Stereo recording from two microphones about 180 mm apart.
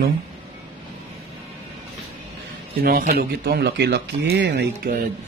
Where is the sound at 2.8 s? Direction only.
55° right (ahead or behind).